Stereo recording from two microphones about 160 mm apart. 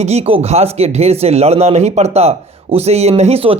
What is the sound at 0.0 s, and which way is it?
Speech, 40° right (ahead or behind).